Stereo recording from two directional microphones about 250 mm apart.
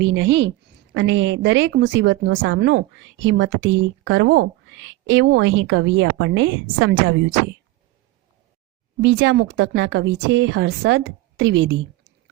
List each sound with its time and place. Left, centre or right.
0.0 s a woman's voice: right
9.0 s a woman's voice: right